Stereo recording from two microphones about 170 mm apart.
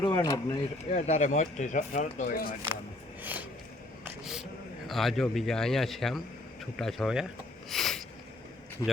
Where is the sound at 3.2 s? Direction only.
10° right (ahead or behind).